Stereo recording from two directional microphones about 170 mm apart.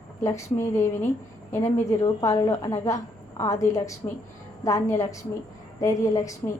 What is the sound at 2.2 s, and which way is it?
A woman's voice, 20° left (ahead or behind).